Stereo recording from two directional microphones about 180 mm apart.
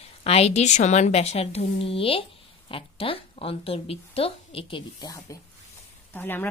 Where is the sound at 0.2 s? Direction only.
35° left (ahead or behind).